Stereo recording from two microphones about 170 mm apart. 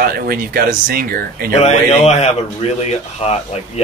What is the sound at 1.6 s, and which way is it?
Speech, 40° left (ahead or behind).